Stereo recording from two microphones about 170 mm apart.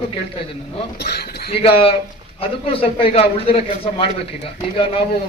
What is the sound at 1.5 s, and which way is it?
Speech, 35° left (ahead or behind).